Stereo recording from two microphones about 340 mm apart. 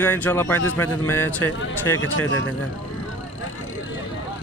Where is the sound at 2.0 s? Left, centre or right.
Left.